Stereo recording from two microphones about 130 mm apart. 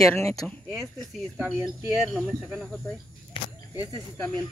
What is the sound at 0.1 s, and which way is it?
Speech, 20° left (ahead or behind).